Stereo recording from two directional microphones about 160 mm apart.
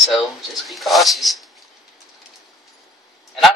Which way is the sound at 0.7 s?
Centre (ahead or behind).